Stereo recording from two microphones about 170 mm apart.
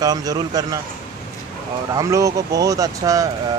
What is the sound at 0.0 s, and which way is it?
Speech, 20° right (ahead or behind).